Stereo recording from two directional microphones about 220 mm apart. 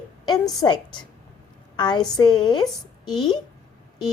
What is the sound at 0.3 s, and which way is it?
A woman's voice, 15° left (ahead or behind).